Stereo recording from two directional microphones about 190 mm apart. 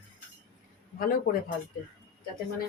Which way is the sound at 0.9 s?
50° left (ahead or behind).